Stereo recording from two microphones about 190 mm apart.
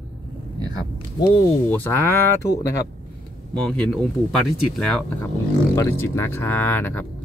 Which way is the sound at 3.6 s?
5° left (ahead or behind).